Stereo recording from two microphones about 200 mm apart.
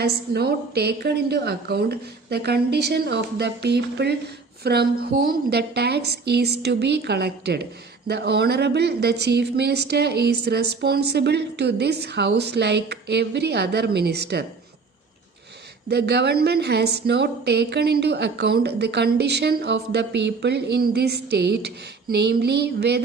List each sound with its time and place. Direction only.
0.0 s a woman's voice: 55° right (ahead or behind)
15.9 s a woman's voice: 55° right (ahead or behind)